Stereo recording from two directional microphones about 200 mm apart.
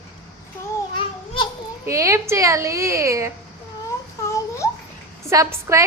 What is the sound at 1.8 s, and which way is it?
Speech, 15° right (ahead or behind).